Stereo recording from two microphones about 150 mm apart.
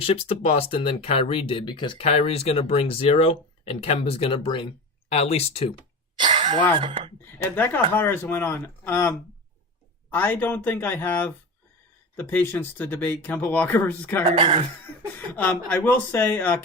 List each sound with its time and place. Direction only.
0.0 s speech: 40° left (ahead or behind)
6.2 s a sound: 45° right (ahead or behind)
6.8 s speech: 35° right (ahead or behind)
7.3 s speech: 15° left (ahead or behind)
14.3 s speech: 35° right (ahead or behind)
15.4 s speech: 10° left (ahead or behind)